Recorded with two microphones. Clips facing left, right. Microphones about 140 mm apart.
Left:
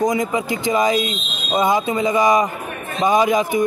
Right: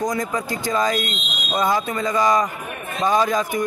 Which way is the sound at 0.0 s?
20° left (ahead or behind).